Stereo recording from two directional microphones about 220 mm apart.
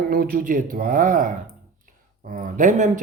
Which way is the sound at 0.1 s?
40° right (ahead or behind).